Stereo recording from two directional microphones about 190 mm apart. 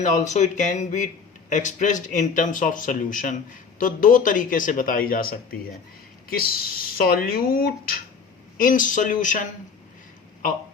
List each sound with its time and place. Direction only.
0.0 s a man's voice: 40° left (ahead or behind)